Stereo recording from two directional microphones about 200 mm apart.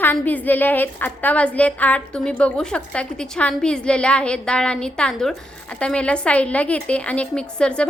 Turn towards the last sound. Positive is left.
turn(degrees=5)  # may be behind; listen again after turning